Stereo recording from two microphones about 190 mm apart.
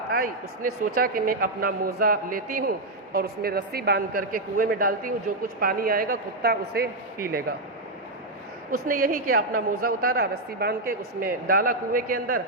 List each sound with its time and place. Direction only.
0.1 s a man's voice: 50° right (ahead or behind)
8.9 s a man's voice: 45° right (ahead or behind)